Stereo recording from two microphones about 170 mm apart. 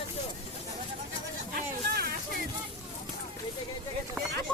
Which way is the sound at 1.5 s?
60° right (ahead or behind).